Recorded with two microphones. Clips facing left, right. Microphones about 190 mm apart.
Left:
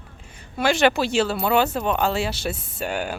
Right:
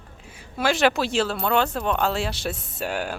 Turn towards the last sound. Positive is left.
turn(degrees=0)  # may be behind; listen again after turning